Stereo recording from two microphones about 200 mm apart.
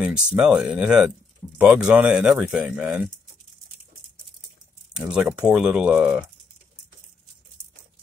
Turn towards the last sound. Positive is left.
turn(degrees=-5)  # may be behind; listen again after turning